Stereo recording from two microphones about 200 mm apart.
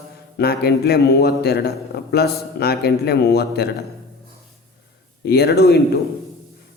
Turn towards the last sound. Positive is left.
turn(degrees=50)  # may be behind; listen again after turning